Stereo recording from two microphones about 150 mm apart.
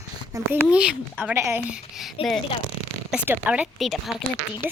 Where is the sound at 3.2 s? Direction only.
10° right (ahead or behind).